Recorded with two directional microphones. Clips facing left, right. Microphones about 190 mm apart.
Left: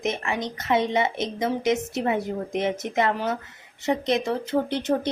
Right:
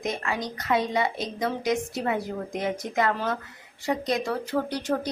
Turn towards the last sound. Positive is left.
turn(degrees=25)  # may be behind; listen again after turning